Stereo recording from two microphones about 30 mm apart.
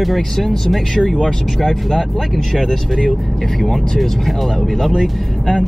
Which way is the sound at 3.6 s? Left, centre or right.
Centre.